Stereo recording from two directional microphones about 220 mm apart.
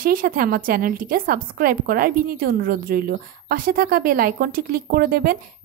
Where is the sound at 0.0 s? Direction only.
40° right (ahead or behind).